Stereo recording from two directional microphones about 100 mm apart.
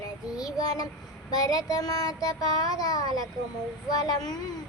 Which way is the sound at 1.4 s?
40° left (ahead or behind).